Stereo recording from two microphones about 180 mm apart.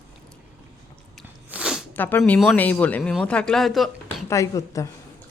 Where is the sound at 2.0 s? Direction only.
10° left (ahead or behind).